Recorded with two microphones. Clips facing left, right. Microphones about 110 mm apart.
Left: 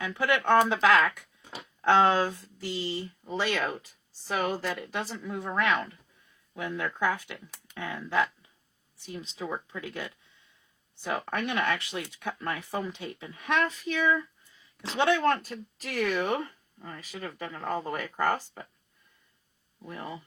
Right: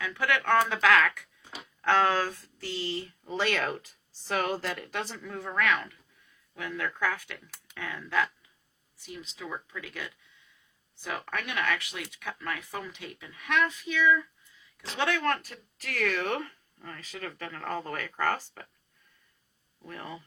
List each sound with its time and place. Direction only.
0.0 s a woman's voice: 20° left (ahead or behind); by 5.2 s 5° left (ahead or behind)
5.2 s speech: 15° left (ahead or behind)
9.1 s speech: 30° left (ahead or behind)
14.8 s speech: 25° left (ahead or behind)
19.8 s speech: 15° left (ahead or behind)